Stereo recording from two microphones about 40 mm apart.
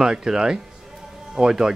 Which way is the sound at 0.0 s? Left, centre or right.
Centre.